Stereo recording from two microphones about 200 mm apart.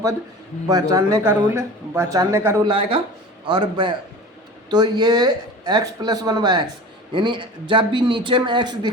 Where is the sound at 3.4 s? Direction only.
25° right (ahead or behind).